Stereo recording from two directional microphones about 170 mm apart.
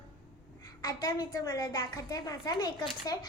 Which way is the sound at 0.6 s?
20° left (ahead or behind).